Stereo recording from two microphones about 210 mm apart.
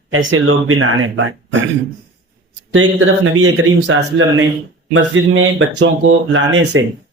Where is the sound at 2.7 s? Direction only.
70° right (ahead or behind).